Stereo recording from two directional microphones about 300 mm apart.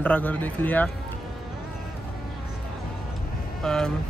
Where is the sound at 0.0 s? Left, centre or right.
Centre.